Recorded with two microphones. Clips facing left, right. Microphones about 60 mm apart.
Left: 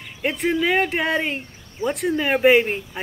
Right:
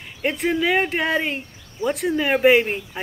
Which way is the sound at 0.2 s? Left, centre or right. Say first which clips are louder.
Even; centre.